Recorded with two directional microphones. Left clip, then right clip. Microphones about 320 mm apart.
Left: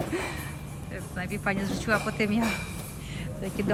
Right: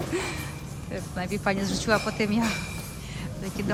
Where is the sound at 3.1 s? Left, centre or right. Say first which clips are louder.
Left 2 dB; centre.